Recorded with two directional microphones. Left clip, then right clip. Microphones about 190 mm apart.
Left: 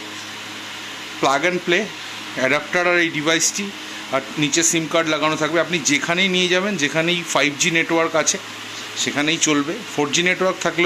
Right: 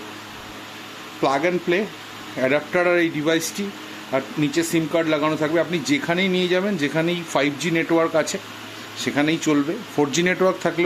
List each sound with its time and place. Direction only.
1.2 s speech: 10° right (ahead or behind)
10.6 s speech: 10° right (ahead or behind)